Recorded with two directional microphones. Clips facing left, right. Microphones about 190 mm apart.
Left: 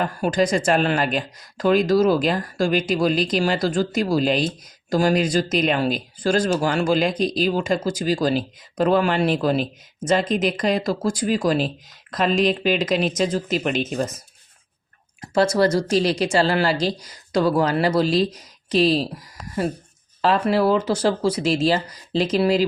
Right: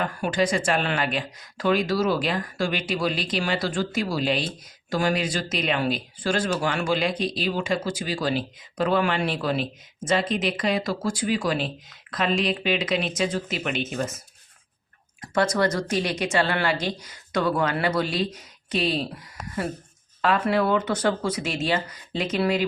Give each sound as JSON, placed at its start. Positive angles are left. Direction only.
{"t": 0.2, "sound": "speech", "side_deg": 40}
{"t": 15.2, "sound": "speech", "side_deg": 30}
{"t": 20.2, "sound": "speech", "side_deg": 35}